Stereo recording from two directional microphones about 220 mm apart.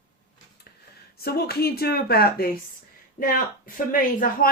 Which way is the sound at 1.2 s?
45° left (ahead or behind).